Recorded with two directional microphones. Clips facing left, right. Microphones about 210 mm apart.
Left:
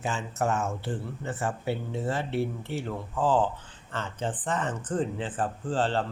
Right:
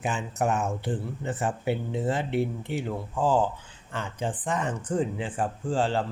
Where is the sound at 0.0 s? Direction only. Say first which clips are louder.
Right 2 dB; 15° right (ahead or behind).